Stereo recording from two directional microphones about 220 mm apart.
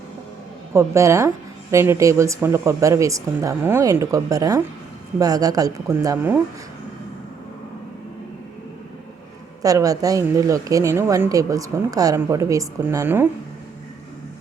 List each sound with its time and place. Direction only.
0.7 s speech: 15° right (ahead or behind)
9.6 s speech: 15° right (ahead or behind)